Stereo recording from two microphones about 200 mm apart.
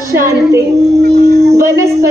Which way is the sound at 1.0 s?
50° right (ahead or behind).